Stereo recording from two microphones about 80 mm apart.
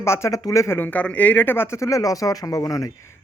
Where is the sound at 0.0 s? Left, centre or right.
Left.